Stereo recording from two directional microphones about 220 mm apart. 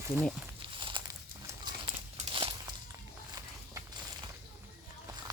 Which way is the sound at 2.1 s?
25° right (ahead or behind).